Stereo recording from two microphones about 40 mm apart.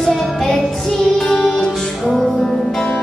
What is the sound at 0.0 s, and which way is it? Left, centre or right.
Music, centre.